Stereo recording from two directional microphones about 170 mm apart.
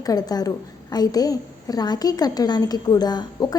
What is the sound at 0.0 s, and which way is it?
A woman's voice, 20° left (ahead or behind).